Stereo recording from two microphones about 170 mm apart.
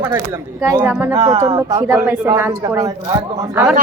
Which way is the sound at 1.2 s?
25° right (ahead or behind).